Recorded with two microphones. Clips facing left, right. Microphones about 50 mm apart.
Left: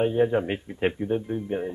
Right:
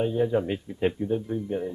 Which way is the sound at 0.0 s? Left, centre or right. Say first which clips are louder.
Left 2 dB; left.